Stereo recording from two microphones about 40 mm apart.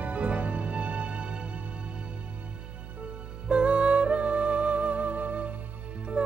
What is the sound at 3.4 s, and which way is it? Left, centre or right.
Music, right.